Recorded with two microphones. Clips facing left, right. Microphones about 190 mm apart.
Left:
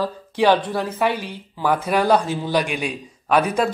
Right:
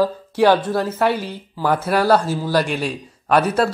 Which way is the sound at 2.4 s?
15° left (ahead or behind).